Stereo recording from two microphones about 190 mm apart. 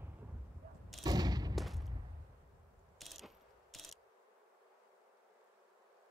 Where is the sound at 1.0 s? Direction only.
20° right (ahead or behind).